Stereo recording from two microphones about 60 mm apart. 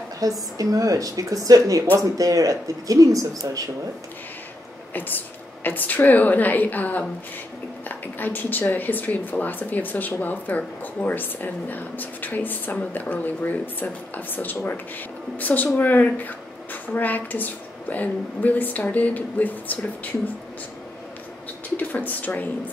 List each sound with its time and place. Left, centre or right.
0.2 s speech: right
4.9 s a woman's voice: left
21.7 s a woman's voice: left